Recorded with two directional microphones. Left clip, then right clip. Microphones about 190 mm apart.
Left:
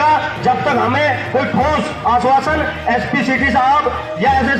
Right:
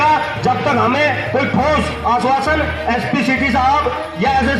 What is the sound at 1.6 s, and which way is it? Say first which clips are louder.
A man's voice: even; 40° right (ahead or behind).